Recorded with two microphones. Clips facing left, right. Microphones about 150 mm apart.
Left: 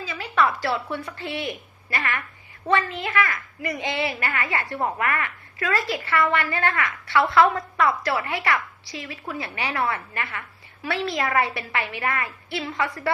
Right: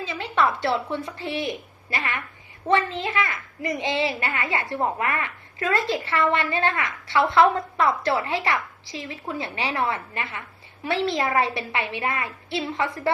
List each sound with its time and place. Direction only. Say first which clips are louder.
0.0 s a woman's voice: even; 25° right (ahead or behind)